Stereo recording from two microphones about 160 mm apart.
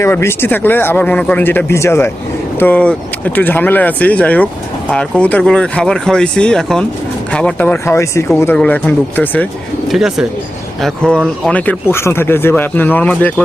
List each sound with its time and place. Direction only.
0.0 s speech: 15° left (ahead or behind)
9.9 s speech: centre (ahead or behind)